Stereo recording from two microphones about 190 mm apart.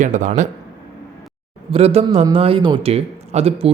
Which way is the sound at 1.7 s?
35° right (ahead or behind).